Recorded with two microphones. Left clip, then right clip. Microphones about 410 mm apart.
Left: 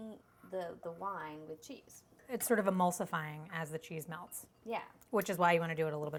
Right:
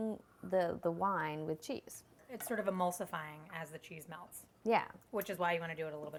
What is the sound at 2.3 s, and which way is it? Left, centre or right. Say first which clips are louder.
A woman's voice: left 5 dB; left.